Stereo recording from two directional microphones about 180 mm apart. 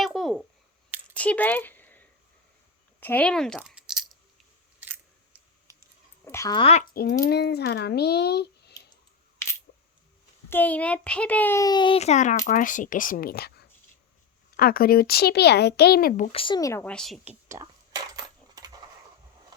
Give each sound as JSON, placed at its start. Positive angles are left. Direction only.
{"t": 0.0, "sound": "a sound", "side_deg": 0}
{"t": 4.8, "sound": "scissors", "side_deg": -10}
{"t": 6.2, "sound": "a child's voice", "side_deg": 15}
{"t": 6.6, "sound": "speech", "side_deg": 35}
{"t": 6.9, "sound": "speech", "side_deg": 60}
{"t": 9.7, "sound": "a sound", "side_deg": 65}
{"t": 10.5, "sound": "a child's voice", "side_deg": 10}
{"t": 16.3, "sound": "speech", "side_deg": 30}
{"t": 16.8, "sound": "speech", "side_deg": 5}
{"t": 17.2, "sound": "coin", "side_deg": -15}